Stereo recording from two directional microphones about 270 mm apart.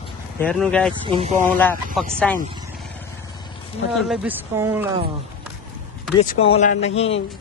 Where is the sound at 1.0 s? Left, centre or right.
Right.